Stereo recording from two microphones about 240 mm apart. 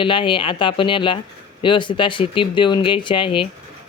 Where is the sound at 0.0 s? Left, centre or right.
Left.